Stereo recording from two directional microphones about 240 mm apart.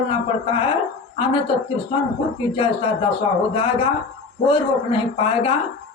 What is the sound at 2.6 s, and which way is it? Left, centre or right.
A man's voice, left.